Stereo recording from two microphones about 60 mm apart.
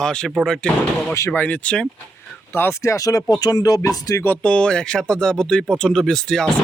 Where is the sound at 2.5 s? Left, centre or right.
Left.